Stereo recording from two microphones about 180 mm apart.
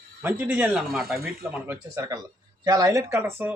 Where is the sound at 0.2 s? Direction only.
10° right (ahead or behind).